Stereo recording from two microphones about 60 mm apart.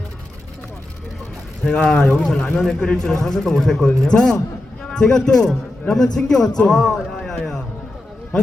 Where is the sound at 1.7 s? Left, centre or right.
Centre.